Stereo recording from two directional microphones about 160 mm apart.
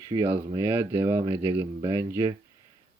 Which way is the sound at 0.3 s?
15° right (ahead or behind).